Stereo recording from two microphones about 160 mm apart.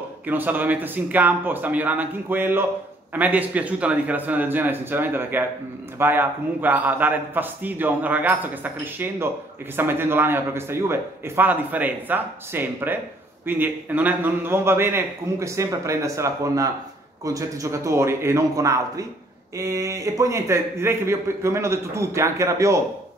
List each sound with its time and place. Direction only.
0.3 s a man's voice: 10° right (ahead or behind)